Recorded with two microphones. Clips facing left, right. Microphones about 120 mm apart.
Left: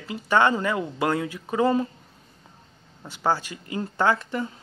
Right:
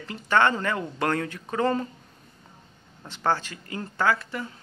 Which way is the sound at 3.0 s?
10° left (ahead or behind).